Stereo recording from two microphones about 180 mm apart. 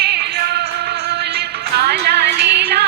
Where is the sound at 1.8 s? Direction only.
65° right (ahead or behind).